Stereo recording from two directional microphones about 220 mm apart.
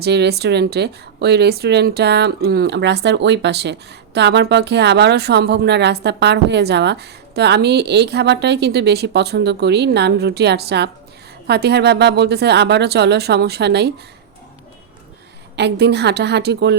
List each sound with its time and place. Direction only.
0.0 s speech: 50° right (ahead or behind)
15.5 s speech: 50° right (ahead or behind)